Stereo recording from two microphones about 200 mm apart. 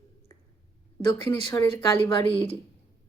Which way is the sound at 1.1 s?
15° left (ahead or behind).